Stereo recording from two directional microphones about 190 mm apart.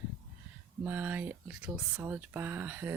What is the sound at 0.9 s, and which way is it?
Speech, 10° right (ahead or behind).